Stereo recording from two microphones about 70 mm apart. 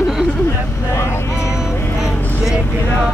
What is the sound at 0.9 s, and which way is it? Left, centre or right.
Vehicle, left.